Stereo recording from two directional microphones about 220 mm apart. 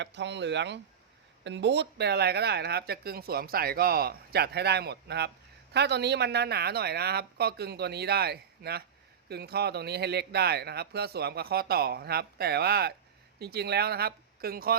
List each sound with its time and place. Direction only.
0.0 s speech: 55° right (ahead or behind)